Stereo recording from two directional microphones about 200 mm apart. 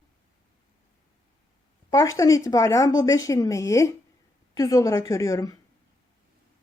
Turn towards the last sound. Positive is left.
turn(degrees=15)  # may be behind; listen again after turning